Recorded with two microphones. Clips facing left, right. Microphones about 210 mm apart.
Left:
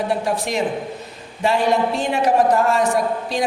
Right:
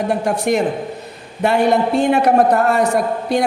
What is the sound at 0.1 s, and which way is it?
Speech, 45° right (ahead or behind).